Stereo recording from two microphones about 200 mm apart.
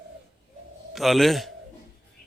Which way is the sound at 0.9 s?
Centre (ahead or behind).